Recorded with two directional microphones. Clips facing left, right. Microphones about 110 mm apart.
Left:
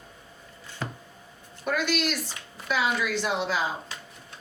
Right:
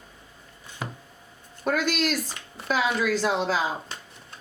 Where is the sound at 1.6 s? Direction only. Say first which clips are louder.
Right 2 dB; 40° right (ahead or behind).